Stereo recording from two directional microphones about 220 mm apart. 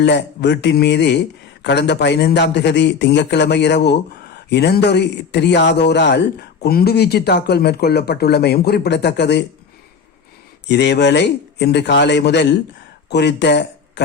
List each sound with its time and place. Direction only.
0.0 s speech: 50° left (ahead or behind)
10.7 s speech: 50° left (ahead or behind)